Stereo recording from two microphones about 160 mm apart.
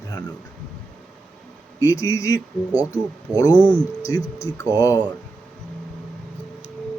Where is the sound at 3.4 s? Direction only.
25° left (ahead or behind).